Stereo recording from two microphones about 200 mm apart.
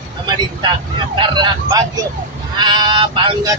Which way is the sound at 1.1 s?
20° right (ahead or behind).